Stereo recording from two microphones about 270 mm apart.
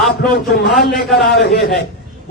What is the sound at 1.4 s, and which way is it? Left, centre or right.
Speech, left.